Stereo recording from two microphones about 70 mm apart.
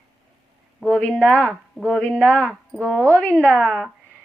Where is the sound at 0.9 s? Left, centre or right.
Centre.